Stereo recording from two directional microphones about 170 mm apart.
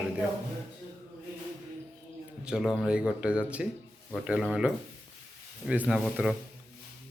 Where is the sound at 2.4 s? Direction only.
5° right (ahead or behind).